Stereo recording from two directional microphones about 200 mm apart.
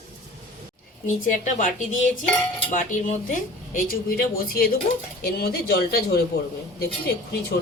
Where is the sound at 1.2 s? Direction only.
40° left (ahead or behind).